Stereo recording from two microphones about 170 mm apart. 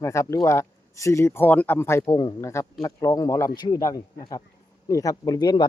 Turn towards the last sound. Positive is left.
turn(degrees=25)  # may be behind; listen again after turning